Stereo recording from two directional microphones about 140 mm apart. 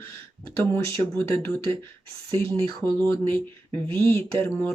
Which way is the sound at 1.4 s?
10° left (ahead or behind).